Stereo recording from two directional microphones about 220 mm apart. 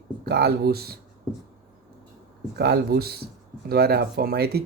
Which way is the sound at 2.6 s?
45° right (ahead or behind).